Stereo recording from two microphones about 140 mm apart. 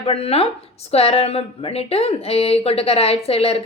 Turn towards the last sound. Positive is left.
turn(degrees=45)  # may be behind; listen again after turning